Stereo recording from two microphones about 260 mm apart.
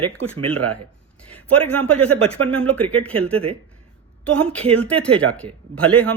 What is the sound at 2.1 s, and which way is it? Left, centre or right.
A woman's voice, centre.